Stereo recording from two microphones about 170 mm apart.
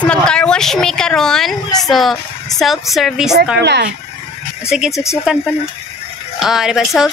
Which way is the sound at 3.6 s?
90° right.